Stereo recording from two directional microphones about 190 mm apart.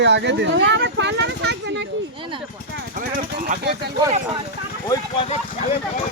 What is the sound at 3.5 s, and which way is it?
Speech, 55° right (ahead or behind).